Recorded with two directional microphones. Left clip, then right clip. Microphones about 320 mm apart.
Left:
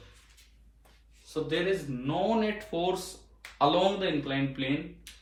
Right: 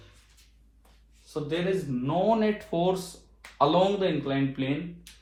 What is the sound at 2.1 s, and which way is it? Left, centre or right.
A man's voice, centre.